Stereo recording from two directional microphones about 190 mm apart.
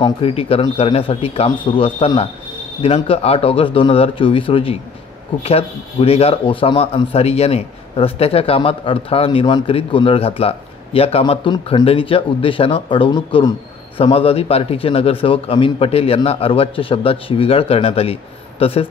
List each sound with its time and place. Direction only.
0.0 s speech: 30° left (ahead or behind)